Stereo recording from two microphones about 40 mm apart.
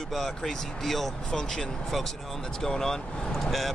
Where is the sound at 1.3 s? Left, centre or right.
Centre.